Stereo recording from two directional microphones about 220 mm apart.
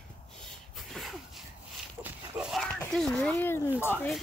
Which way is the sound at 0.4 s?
Centre (ahead or behind).